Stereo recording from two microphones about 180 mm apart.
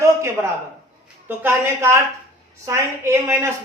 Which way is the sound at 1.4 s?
15° right (ahead or behind).